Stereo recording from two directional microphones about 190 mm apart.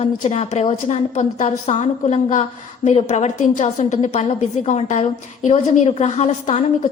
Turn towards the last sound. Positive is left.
turn(degrees=35)  # may be behind; listen again after turning